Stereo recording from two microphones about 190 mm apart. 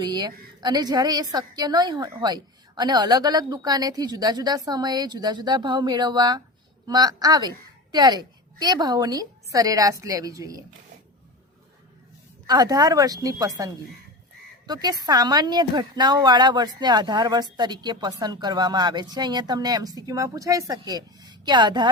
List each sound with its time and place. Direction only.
0.0 s speech: 20° right (ahead or behind)
12.5 s speech: 20° right (ahead or behind)